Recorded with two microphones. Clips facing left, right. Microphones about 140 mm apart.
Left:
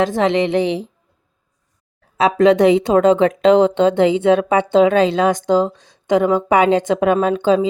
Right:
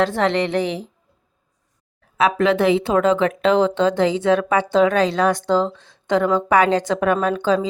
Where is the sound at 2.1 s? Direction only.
25° left (ahead or behind).